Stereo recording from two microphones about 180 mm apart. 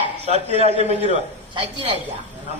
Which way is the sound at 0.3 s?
35° right (ahead or behind).